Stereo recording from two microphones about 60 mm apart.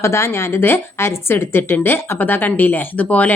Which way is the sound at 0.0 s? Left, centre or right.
Left.